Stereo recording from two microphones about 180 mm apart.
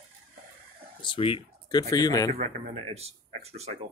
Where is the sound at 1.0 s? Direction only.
30° left (ahead or behind).